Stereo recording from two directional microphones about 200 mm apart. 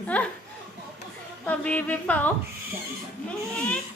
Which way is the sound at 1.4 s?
10° left (ahead or behind).